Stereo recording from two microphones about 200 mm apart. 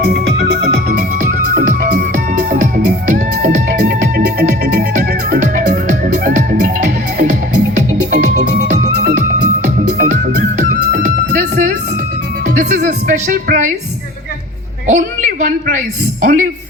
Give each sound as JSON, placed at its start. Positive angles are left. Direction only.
{"t": 0.0, "sound": "music", "side_deg": -50}
{"t": 10.0, "sound": "music", "side_deg": -45}
{"t": 14.8, "sound": "a sound", "side_deg": -40}
{"t": 16.2, "sound": "a man's voice", "side_deg": -40}